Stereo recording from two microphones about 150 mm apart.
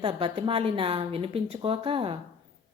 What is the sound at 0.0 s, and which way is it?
A woman's voice, 35° right (ahead or behind).